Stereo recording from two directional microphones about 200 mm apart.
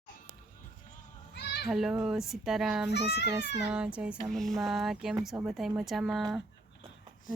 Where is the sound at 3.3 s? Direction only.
5° right (ahead or behind).